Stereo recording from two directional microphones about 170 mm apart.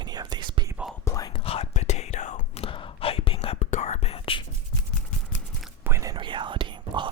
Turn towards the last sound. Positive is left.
turn(degrees=-30)  # may be behind; listen again after turning